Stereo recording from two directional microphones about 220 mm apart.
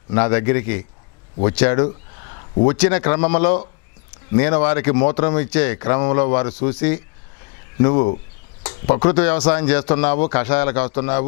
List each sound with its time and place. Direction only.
0.1 s a man's voice: 10° left (ahead or behind)
1.8 s a sound: 25° left (ahead or behind)
2.8 s a man's voice: 10° left (ahead or behind)
7.8 s speech: 25° left (ahead or behind)
8.6 s a sound: 20° left (ahead or behind)
9.0 s a man's voice: 10° left (ahead or behind)